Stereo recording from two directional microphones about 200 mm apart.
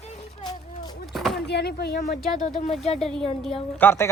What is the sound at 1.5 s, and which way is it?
Speech, 55° left (ahead or behind).